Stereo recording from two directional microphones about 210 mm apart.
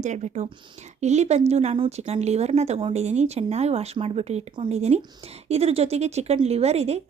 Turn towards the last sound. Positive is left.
turn(degrees=-30)  # may be behind; listen again after turning